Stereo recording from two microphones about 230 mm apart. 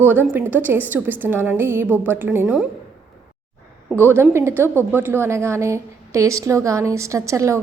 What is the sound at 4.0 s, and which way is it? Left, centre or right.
A woman's voice, centre.